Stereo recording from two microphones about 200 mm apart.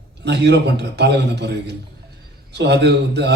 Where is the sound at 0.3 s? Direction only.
60° right (ahead or behind).